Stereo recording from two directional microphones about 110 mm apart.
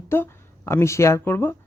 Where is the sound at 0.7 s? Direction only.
25° left (ahead or behind).